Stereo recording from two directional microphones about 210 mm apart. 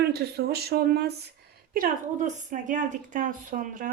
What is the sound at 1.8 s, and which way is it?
A woman's voice, 35° right (ahead or behind).